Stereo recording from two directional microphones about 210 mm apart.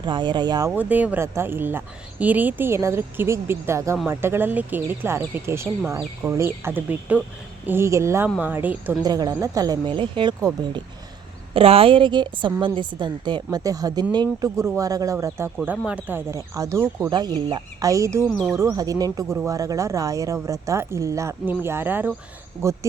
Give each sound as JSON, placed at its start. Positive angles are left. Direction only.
{"t": 0.0, "sound": "a woman's voice", "side_deg": -20}
{"t": 0.7, "sound": "a woman's voice", "side_deg": -10}
{"t": 18.3, "sound": "speech", "side_deg": 5}
{"t": 18.5, "sound": "speech", "side_deg": -15}